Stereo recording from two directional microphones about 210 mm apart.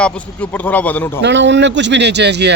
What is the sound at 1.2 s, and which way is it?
Speech, 60° right (ahead or behind).